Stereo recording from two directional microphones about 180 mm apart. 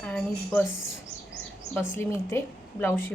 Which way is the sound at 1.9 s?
15° left (ahead or behind).